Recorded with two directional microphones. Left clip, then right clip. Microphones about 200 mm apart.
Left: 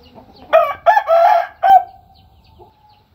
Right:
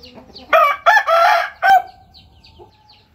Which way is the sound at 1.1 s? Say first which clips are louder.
Left 2 dB; 20° right (ahead or behind).